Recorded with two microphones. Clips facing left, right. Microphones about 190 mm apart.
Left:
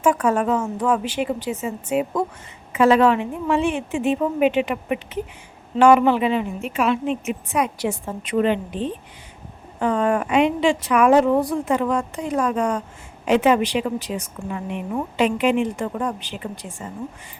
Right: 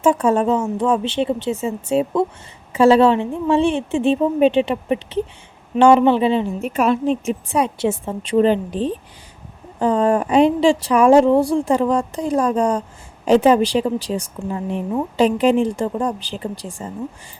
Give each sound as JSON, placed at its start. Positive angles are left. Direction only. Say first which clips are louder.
{"t": 0.0, "sound": "a woman's voice", "louder": "right 3 dB", "side_deg": -25}